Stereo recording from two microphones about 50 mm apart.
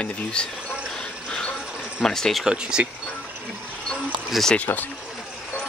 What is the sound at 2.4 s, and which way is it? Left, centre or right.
Speech, centre.